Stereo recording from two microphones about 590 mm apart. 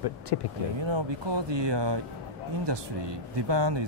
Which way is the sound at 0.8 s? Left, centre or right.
Right.